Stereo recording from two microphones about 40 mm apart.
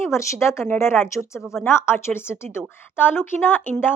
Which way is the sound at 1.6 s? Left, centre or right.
Left.